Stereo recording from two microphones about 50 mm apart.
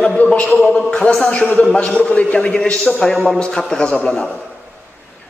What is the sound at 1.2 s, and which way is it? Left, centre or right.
A man's voice, left.